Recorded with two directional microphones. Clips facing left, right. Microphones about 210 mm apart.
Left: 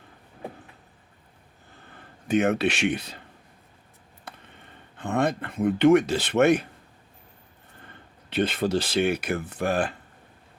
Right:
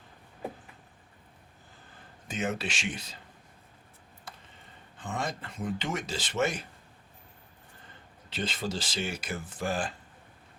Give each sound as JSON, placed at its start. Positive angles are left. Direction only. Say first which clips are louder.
{"t": 2.2, "sound": "speech", "louder": "left 11 dB", "side_deg": 60}
{"t": 4.3, "sound": "a sound", "louder": "left 4 dB", "side_deg": 60}
{"t": 4.9, "sound": "speech", "louder": "left 10 dB", "side_deg": 60}
{"t": 7.9, "sound": "speech", "louder": "left 6 dB", "side_deg": 60}